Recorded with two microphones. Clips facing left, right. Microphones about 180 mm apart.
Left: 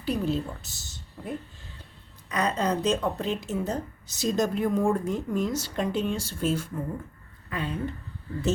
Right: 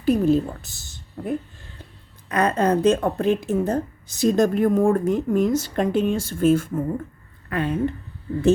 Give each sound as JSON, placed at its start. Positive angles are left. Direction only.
{"t": 0.0, "sound": "speech", "side_deg": -50}